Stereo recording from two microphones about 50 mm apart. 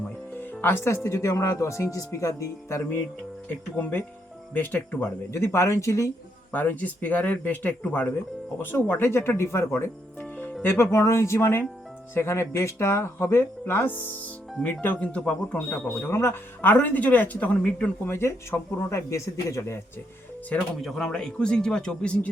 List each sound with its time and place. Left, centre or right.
0.6 s speech: left
3.5 s speech: left
5.3 s a man's voice: left
6.5 s speech: left
10.9 s a man's voice: left
13.8 s speech: left
15.0 s a man's voice: left
15.9 s speech: left
16.6 s speech: left
18.1 s a man's voice: left
20.5 s speech: left
20.8 s speech: centre